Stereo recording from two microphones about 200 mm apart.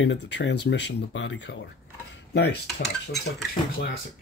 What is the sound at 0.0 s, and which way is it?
Speech, 60° left (ahead or behind).